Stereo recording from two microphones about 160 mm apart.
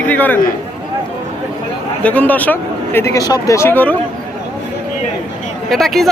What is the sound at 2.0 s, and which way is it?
Speech, 10° left (ahead or behind).